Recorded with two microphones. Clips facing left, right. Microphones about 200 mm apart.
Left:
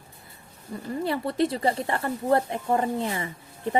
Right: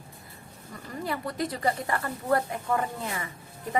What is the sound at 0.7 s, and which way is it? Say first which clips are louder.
A woman's voice: left 6 dB; 25° left (ahead or behind).